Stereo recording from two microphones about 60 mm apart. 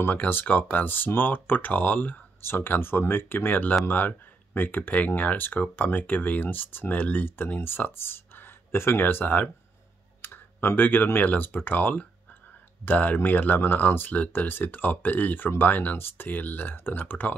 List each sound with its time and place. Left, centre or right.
0.0 s speech: left
2.4 s speech: left
10.2 s computer keyboard: left
11.1 s speech: left